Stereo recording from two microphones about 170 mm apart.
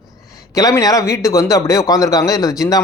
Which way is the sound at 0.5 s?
20° left (ahead or behind).